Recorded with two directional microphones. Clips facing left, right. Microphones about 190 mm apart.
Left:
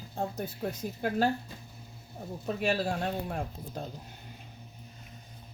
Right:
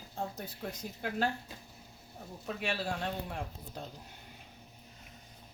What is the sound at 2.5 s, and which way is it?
Speech, 40° left (ahead or behind).